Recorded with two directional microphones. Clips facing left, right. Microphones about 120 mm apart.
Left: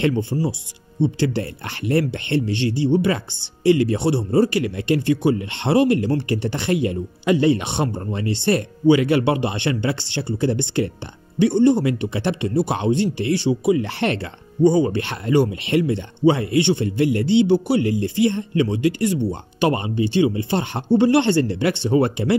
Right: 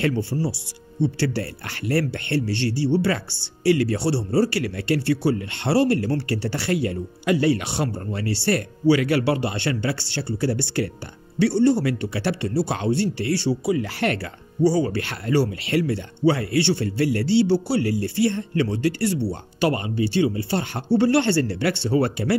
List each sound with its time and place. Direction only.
0.0 s a man's voice: 20° left (ahead or behind)